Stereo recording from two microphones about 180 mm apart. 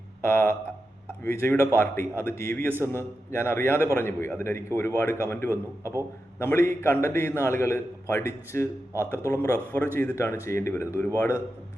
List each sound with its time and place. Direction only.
0.3 s a man's voice: 15° left (ahead or behind)
5.8 s a man's voice: 15° right (ahead or behind)
6.4 s a man's voice: 15° left (ahead or behind)